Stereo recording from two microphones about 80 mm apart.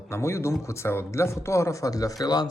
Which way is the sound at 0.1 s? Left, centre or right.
Left.